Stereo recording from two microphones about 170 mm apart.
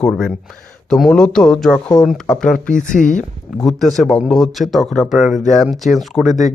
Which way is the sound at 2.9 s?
50° left (ahead or behind).